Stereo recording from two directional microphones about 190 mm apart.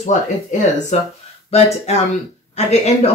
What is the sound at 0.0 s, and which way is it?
Speech, 35° left (ahead or behind).